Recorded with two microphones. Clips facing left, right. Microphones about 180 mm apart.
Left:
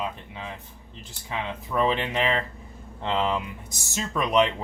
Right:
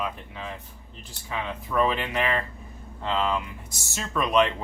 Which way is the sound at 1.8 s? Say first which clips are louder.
Even; 25° left (ahead or behind).